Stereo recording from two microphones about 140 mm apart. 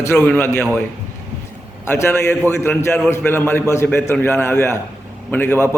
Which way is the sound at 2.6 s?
15° left (ahead or behind).